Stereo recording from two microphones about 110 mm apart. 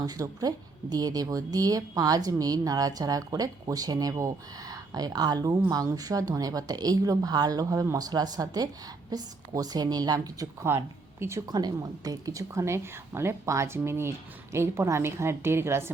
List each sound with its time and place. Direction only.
0.0 s speech: 35° right (ahead or behind)
11.5 s a woman's voice: 35° right (ahead or behind)